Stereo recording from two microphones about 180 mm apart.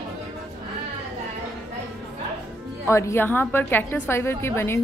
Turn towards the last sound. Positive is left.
turn(degrees=15)  # may be behind; listen again after turning